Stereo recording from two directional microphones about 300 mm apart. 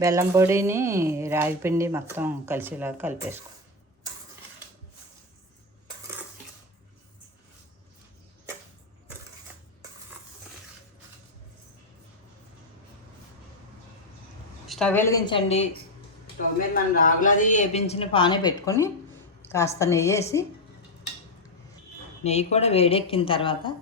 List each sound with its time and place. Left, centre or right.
0.0 s a woman's voice: centre
14.7 s a woman's voice: centre
16.7 s a woman's voice: left; by 20.2 s centre
22.2 s a woman's voice: left